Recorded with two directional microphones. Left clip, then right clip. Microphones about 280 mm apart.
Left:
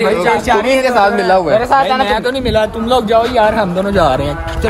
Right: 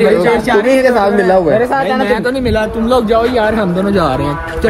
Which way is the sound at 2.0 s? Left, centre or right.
Left.